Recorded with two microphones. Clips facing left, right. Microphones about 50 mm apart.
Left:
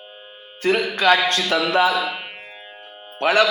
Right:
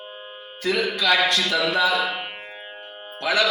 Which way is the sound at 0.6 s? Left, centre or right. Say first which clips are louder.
Left 4 dB; left.